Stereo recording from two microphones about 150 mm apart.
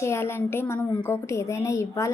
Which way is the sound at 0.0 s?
15° left (ahead or behind).